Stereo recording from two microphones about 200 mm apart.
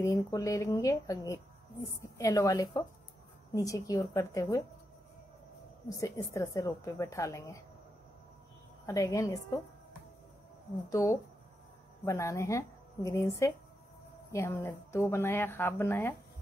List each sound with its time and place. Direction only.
0.0 s a woman's voice: 15° left (ahead or behind)
5.9 s a woman's voice: 15° left (ahead or behind)
8.8 s a woman's voice: 15° left (ahead or behind)
10.9 s a woman's voice: 15° left (ahead or behind)